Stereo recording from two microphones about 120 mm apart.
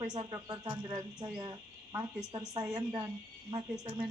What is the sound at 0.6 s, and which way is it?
Speech, 10° right (ahead or behind).